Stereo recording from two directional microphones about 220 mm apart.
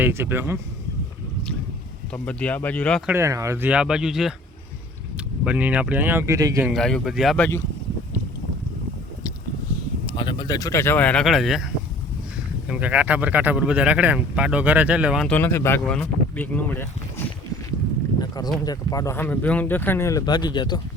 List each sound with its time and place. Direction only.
0.0 s speech: 10° right (ahead or behind)
2.1 s speech: 5° left (ahead or behind)
3.1 s a man's voice: 15° right (ahead or behind)
6.7 s a man's voice: centre (ahead or behind)
10.1 s a man's voice: 25° left (ahead or behind)
18.2 s a sound: 15° left (ahead or behind)
18.6 s speech: 15° left (ahead or behind)